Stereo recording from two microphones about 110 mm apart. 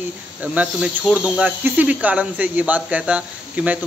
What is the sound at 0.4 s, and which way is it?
Speech, 10° right (ahead or behind).